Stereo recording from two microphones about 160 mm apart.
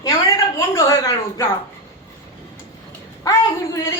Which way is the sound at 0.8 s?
20° left (ahead or behind).